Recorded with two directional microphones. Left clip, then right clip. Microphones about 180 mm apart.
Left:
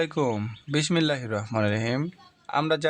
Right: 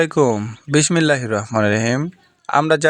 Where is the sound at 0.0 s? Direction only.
35° right (ahead or behind).